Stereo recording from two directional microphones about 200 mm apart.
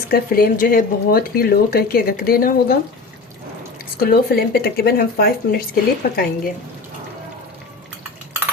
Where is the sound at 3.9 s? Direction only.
50° left (ahead or behind).